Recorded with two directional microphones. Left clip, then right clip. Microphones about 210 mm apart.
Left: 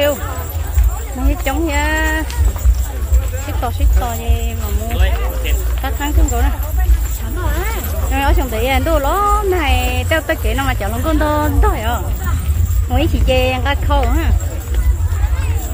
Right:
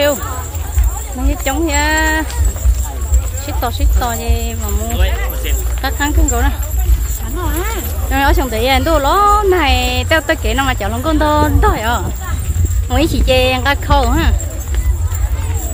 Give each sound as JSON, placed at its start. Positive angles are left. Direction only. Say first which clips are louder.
{"t": 1.3, "sound": "speech", "louder": "right 2 dB", "side_deg": -15}
{"t": 3.6, "sound": "speech", "louder": "right 4 dB", "side_deg": -20}
{"t": 4.9, "sound": "a sound", "louder": "left 1 dB", "side_deg": -50}
{"t": 5.8, "sound": "speech", "louder": "right 5 dB", "side_deg": -20}
{"t": 7.5, "sound": "speech", "louder": "right 2 dB", "side_deg": -55}
{"t": 8.1, "sound": "speech", "louder": "right 4 dB", "side_deg": -20}